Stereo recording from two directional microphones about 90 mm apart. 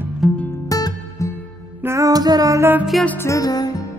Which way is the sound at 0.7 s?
40° left (ahead or behind).